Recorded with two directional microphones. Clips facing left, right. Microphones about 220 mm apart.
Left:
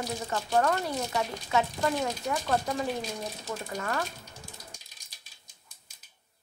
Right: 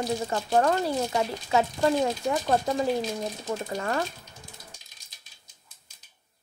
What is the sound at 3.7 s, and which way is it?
Speech, 30° right (ahead or behind).